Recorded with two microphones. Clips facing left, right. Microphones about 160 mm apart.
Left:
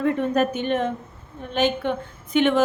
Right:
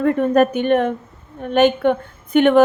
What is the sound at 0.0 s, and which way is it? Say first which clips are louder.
A woman's voice: right 6 dB; 55° right (ahead or behind).